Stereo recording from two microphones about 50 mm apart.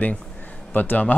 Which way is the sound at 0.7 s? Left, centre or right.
Left.